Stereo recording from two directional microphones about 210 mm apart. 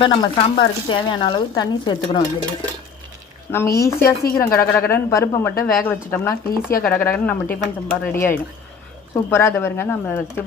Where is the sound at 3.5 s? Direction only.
10° left (ahead or behind).